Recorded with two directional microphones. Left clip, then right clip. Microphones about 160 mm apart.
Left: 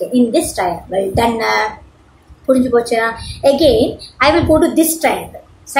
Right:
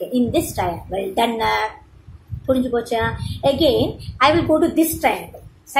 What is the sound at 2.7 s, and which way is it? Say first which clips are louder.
A woman's voice: left 7 dB; 15° right (ahead or behind).